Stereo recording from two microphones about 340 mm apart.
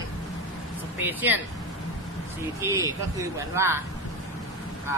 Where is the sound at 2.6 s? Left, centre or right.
Centre.